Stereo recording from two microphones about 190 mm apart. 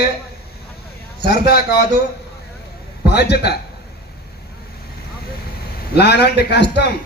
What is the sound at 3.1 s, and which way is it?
Speech, 60° left (ahead or behind).